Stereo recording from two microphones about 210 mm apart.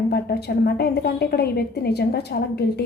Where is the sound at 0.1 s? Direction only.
50° left (ahead or behind).